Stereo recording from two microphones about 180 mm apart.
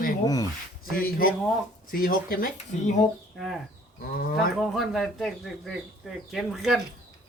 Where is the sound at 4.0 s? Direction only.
55° left (ahead or behind).